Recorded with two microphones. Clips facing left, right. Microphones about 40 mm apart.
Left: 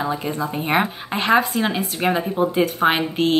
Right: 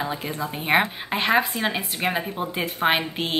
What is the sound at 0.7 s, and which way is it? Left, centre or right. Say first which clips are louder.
Speech: right 1 dB; centre.